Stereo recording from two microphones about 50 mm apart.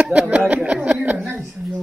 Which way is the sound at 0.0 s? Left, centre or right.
Right.